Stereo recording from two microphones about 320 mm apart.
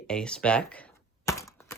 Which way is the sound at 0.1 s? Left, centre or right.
Centre.